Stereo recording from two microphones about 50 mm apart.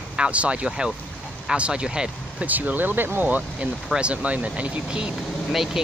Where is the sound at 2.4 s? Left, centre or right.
Right.